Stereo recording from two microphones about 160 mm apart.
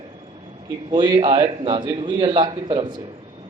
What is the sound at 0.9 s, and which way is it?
A man's voice, 30° right (ahead or behind).